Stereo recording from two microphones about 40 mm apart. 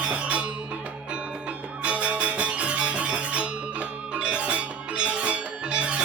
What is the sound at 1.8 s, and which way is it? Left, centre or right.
Music, right.